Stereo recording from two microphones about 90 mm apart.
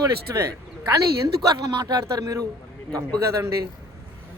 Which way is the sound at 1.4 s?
50° right (ahead or behind).